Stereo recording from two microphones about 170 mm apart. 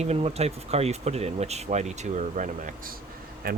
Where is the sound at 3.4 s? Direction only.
60° right (ahead or behind).